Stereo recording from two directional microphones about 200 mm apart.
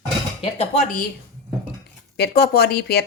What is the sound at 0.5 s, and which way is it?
Speech, 35° left (ahead or behind).